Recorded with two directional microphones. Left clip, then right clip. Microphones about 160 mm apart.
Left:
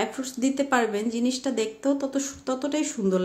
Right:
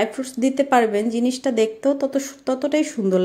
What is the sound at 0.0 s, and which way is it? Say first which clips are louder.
A woman's voice: right 6 dB; 20° right (ahead or behind).